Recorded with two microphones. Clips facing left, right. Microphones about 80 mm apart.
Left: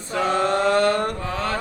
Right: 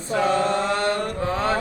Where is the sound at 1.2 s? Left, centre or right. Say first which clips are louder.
Right 3 dB; right.